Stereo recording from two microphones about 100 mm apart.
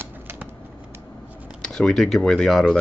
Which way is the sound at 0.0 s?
20° right (ahead or behind).